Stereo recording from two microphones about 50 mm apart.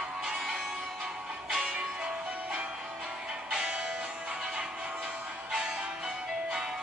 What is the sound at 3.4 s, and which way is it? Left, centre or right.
Music, centre.